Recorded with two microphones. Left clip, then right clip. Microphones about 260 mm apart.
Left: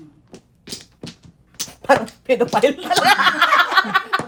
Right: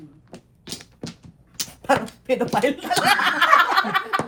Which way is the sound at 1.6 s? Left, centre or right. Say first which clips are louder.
Left 5 dB; left.